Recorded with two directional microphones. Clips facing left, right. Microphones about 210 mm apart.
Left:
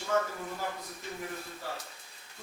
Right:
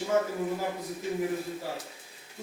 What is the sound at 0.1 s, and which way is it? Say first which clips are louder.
Speech: right 3 dB; 20° right (ahead or behind).